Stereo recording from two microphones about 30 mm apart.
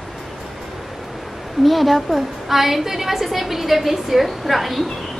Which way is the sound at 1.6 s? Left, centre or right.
Centre.